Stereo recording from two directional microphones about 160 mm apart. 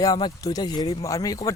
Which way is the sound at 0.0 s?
25° left (ahead or behind).